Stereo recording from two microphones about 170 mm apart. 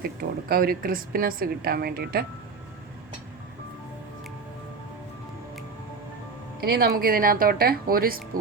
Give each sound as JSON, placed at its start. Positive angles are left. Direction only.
{"t": 0.0, "sound": "a woman's voice", "side_deg": -65}
{"t": 6.6, "sound": "a woman's voice", "side_deg": -65}